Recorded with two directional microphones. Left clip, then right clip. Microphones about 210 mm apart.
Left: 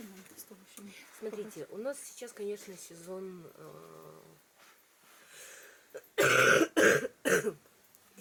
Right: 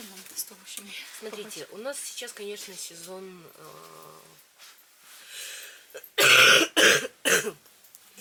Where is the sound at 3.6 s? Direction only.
20° left (ahead or behind).